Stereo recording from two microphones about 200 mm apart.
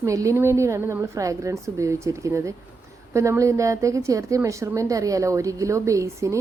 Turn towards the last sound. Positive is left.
turn(degrees=-15)  # may be behind; listen again after turning